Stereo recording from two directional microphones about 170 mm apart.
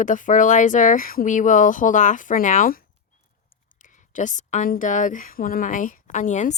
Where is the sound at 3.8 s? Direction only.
45° left (ahead or behind).